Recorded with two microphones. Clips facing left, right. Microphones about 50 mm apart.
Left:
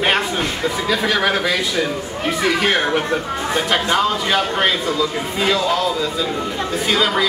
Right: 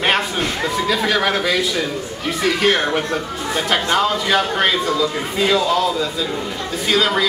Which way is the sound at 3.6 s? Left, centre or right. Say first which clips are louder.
Right 1 dB; centre.